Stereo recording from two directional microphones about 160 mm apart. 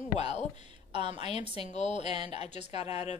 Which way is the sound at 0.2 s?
40° left (ahead or behind).